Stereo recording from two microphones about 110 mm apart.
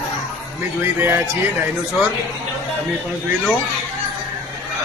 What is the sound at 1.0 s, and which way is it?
Speech, 20° right (ahead or behind).